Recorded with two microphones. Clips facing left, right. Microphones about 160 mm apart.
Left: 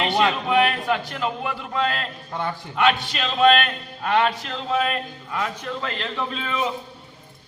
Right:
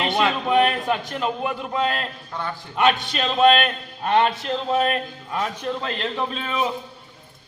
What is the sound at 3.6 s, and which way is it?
A man's voice, 25° right (ahead or behind).